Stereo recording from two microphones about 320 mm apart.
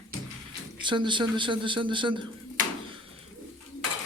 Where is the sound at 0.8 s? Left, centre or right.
Centre.